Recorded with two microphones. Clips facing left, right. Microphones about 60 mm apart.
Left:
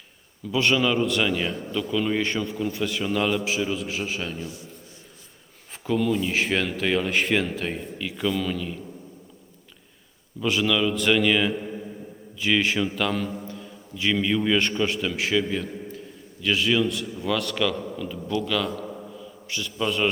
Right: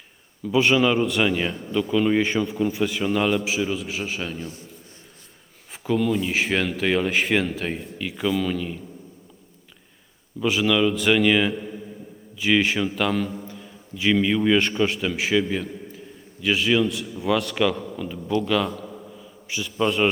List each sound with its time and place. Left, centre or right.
0.6 s a man's voice: centre
4.4 s a man's voice: right
5.8 s speech: centre
10.4 s a man's voice: centre
18.6 s speech: centre
19.1 s mantra: centre